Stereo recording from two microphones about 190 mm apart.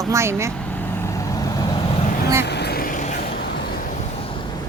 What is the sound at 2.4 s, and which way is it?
Vehicle, 60° left (ahead or behind).